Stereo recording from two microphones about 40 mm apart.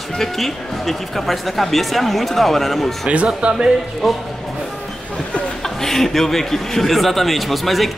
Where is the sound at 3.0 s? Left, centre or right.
Right.